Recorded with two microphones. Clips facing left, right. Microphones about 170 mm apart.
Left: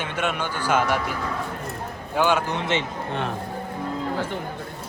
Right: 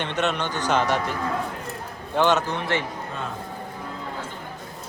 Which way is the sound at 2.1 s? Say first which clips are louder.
Right 1 dB; 10° left (ahead or behind).